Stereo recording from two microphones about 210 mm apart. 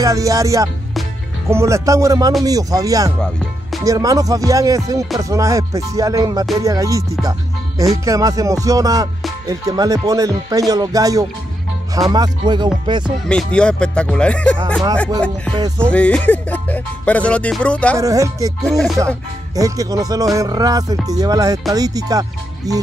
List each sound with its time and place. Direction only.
0.0 s music: 15° right (ahead or behind)
11.9 s speech: 15° right (ahead or behind)
13.3 s music: 5° left (ahead or behind)
15.5 s speech: 20° right (ahead or behind)
15.9 s music: 5° left (ahead or behind)
17.9 s music: 15° right (ahead or behind)
18.7 s music: centre (ahead or behind)
19.5 s music: 15° right (ahead or behind)